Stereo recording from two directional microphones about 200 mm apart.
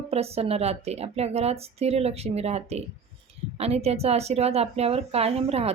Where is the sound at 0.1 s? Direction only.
30° right (ahead or behind).